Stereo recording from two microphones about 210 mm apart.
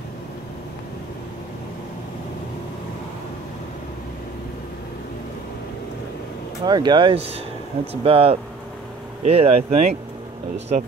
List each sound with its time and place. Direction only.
6.6 s speech: 20° right (ahead or behind)